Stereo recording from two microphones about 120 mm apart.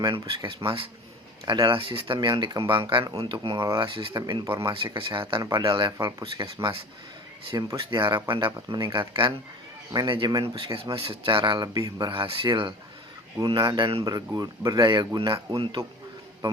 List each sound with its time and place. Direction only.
0.0 s speech: 40° right (ahead or behind)
3.0 s speech: 30° right (ahead or behind)
3.2 s speech: 40° right (ahead or behind)
7.8 s speech: 40° right (ahead or behind)